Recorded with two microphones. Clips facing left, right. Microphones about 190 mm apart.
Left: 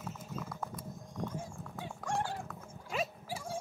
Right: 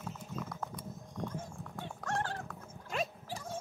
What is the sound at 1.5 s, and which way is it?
Dog, centre (ahead or behind).